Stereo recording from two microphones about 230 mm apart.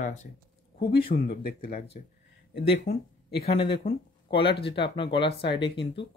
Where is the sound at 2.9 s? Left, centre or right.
Left.